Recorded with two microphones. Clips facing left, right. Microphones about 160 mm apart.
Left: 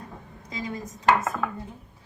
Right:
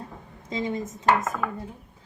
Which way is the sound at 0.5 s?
25° right (ahead or behind).